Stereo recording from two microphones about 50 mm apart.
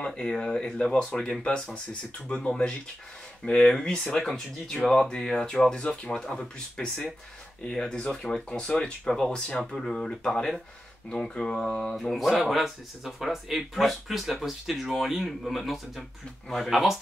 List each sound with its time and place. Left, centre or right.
0.0 s speech: centre
12.0 s speech: centre